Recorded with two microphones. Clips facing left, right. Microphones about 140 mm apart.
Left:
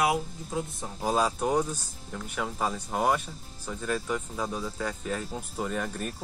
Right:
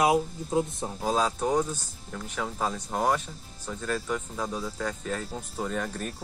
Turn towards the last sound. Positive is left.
turn(degrees=5)  # may be behind; listen again after turning